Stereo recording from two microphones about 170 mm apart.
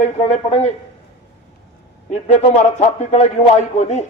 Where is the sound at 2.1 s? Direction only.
40° left (ahead or behind).